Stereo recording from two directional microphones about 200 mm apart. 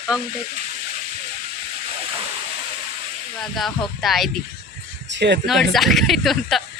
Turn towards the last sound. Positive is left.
turn(degrees=0)  # may be behind; listen again after turning